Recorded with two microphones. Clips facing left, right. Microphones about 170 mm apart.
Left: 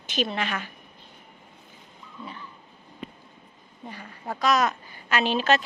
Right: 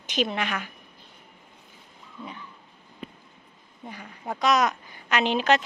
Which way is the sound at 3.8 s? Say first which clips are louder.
Even; 10° right (ahead or behind).